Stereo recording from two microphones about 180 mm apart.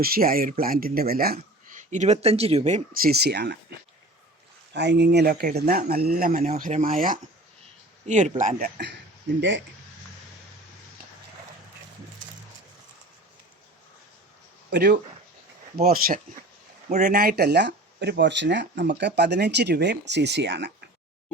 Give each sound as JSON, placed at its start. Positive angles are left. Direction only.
{"t": 0.0, "sound": "speech", "side_deg": -55}
{"t": 4.7, "sound": "speech", "side_deg": -70}
{"t": 6.5, "sound": "speech", "side_deg": -45}
{"t": 9.4, "sound": "speech", "side_deg": -85}
{"t": 14.7, "sound": "speech", "side_deg": -70}
{"t": 15.8, "sound": "speech", "side_deg": -55}